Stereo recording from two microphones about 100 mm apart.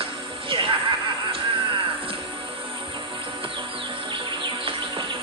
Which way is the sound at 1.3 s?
60° right (ahead or behind).